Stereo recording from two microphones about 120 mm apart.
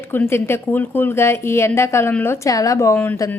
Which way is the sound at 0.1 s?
20° left (ahead or behind).